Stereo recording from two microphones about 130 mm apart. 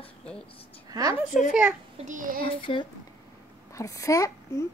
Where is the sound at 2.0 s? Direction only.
85° right.